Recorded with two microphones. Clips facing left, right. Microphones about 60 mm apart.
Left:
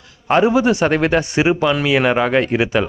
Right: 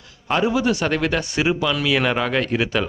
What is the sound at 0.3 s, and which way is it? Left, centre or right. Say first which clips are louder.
Speech: left 6 dB; left.